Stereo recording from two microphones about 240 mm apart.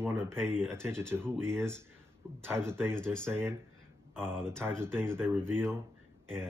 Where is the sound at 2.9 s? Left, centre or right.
Centre.